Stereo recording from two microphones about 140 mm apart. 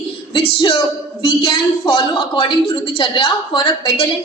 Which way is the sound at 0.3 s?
35° left (ahead or behind).